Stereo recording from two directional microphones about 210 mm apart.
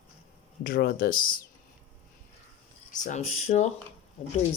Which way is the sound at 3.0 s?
35° left (ahead or behind).